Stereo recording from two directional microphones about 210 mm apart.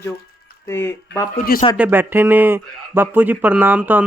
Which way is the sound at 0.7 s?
10° left (ahead or behind).